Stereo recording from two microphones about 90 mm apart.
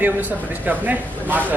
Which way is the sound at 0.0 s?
20° right (ahead or behind).